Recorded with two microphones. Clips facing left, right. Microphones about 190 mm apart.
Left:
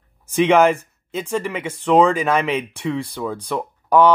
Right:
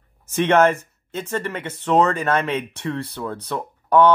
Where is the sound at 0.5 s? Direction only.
10° left (ahead or behind).